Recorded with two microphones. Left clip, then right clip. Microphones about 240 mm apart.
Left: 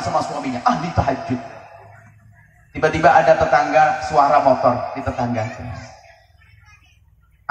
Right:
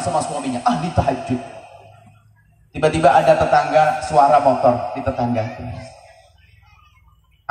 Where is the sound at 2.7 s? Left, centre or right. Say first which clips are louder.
Even; right.